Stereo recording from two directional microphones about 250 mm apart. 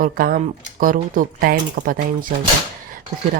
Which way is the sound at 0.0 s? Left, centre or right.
Right.